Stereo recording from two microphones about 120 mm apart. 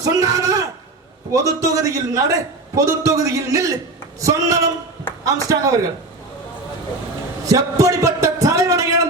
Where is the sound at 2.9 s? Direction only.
25° right (ahead or behind).